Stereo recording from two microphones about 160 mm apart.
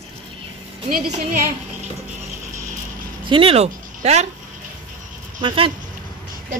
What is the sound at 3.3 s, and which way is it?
Speech, 35° right (ahead or behind).